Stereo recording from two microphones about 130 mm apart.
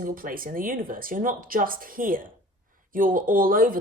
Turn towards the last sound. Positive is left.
turn(degrees=-90)